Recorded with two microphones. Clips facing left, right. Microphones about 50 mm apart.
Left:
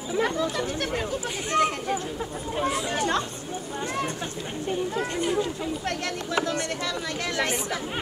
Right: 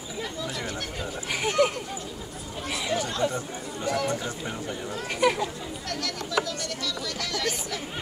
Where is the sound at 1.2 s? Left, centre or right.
Right.